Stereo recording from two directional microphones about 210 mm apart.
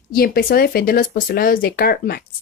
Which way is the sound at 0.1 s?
45° left (ahead or behind).